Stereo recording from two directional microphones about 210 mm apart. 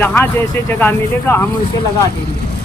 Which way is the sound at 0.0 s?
10° left (ahead or behind).